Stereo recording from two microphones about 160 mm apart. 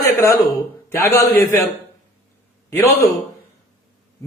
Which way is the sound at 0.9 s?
15° left (ahead or behind).